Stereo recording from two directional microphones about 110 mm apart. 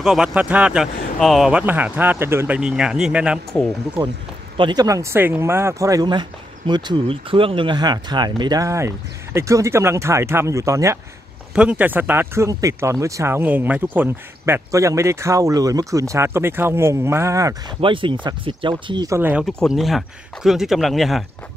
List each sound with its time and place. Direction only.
0.0 s speech: 5° right (ahead or behind)
1.5 s speech: 15° right (ahead or behind)
4.6 s speech: 45° right (ahead or behind)
4.8 s speech: 30° right (ahead or behind)
11.5 s speech: 10° right (ahead or behind)
12.4 s speech: 30° right (ahead or behind)
17.6 s speech: 50° right (ahead or behind)
19.0 s speech: 25° right (ahead or behind)
19.4 s speech: centre (ahead or behind)